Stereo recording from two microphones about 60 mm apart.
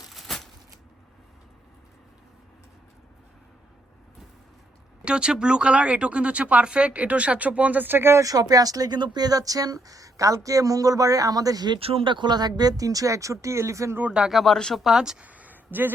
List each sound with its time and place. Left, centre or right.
0.1 s a sound: centre
5.0 s speech: centre; by 8.2 s right
8.2 s speech: right
14.1 s speech: centre
14.8 s speech: centre
15.2 s a sound: right